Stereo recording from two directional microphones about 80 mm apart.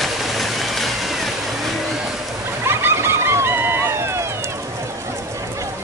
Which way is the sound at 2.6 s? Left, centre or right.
Right.